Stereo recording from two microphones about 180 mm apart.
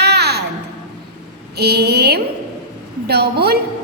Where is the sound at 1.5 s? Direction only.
65° right (ahead or behind).